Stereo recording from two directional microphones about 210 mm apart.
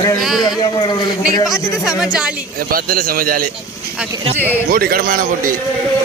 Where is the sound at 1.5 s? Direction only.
5° right (ahead or behind).